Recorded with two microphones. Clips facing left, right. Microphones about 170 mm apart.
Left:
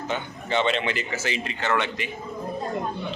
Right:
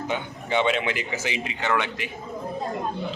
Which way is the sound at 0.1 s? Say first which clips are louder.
Even; 10° right (ahead or behind).